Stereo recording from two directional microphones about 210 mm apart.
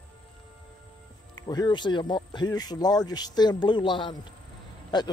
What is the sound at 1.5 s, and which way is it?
A man's voice, 20° left (ahead or behind).